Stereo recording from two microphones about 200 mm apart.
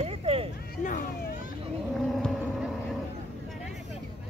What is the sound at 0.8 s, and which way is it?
Cat, 40° left (ahead or behind).